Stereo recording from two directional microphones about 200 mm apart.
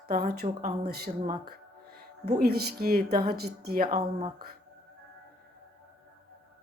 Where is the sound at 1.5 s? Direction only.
50° right (ahead or behind).